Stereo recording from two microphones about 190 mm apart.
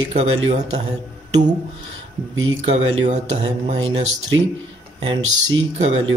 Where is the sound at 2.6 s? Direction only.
35° right (ahead or behind).